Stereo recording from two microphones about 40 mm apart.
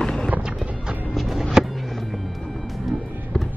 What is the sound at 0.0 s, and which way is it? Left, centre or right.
Music, centre.